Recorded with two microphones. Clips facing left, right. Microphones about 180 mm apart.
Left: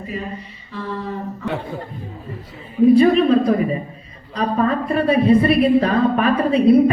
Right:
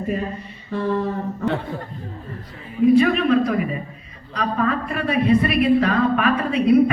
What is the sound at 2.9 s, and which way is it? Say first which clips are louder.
A woman's voice: left 3 dB; 30° left (ahead or behind).